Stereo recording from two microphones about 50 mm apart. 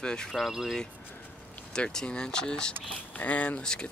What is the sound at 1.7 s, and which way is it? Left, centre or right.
Speech, centre.